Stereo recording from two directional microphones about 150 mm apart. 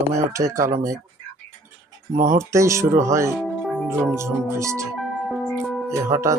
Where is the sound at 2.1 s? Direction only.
60° right (ahead or behind).